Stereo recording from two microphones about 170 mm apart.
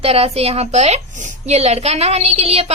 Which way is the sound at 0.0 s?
35° right (ahead or behind).